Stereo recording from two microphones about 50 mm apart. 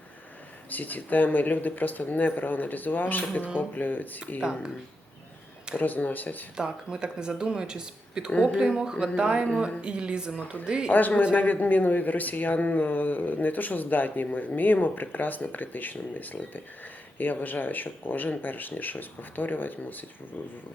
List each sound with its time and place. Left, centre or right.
0.7 s speech: left
5.7 s speech: left
6.6 s speech: centre
8.3 s speech: left
8.7 s a woman's voice: centre
11.3 s speech: left